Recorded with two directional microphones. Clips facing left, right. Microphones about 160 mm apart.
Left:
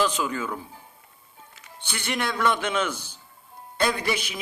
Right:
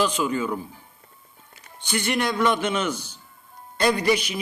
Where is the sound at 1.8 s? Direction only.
10° right (ahead or behind).